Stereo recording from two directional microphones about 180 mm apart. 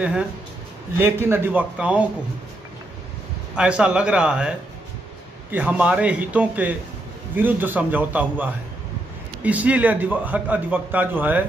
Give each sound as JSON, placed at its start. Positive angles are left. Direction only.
{"t": 0.9, "sound": "a man's voice", "side_deg": -15}
{"t": 3.5, "sound": "a man's voice", "side_deg": -5}